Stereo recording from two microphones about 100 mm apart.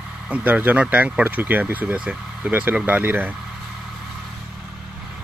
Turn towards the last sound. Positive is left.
turn(degrees=-20)  # may be behind; listen again after turning